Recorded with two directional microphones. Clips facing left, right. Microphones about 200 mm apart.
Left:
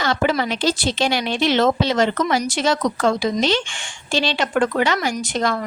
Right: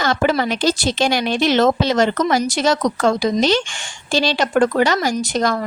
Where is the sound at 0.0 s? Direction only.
45° right (ahead or behind).